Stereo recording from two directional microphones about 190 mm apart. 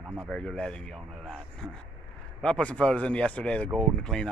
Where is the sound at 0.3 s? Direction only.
5° left (ahead or behind).